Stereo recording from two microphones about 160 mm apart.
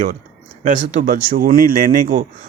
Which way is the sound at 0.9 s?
60° right (ahead or behind).